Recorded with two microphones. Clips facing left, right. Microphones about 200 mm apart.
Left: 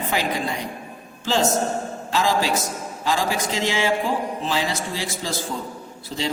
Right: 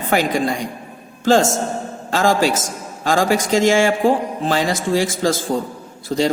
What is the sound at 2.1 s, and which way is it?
A man's voice, 50° right (ahead or behind).